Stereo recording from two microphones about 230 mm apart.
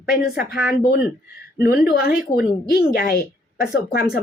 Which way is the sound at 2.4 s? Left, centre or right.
Left.